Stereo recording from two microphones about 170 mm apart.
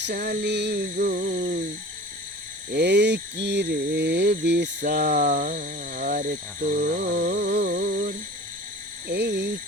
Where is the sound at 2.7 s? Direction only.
80° right; by 6.4 s 55° right (ahead or behind).